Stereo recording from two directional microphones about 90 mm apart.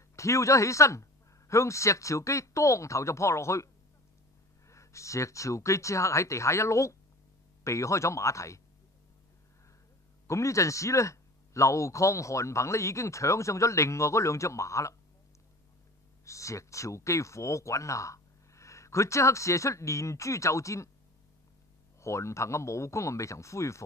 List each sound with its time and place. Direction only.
0.1 s speech: 35° left (ahead or behind)
10.2 s speech: 35° left (ahead or behind)
16.3 s speech: 35° left (ahead or behind)
22.0 s speech: 30° left (ahead or behind)